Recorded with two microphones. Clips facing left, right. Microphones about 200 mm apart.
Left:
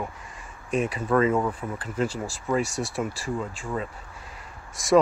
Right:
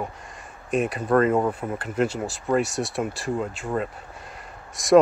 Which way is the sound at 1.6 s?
40° right (ahead or behind).